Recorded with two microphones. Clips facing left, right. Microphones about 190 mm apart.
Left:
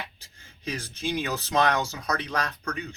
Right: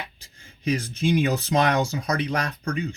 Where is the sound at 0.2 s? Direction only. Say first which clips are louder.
Right 7 dB; 15° right (ahead or behind).